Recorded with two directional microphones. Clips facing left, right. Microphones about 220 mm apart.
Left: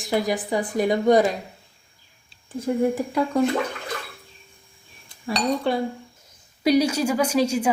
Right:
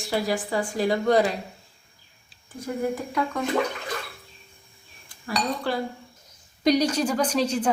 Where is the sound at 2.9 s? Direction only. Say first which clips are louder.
Left 4 dB; 30° left (ahead or behind).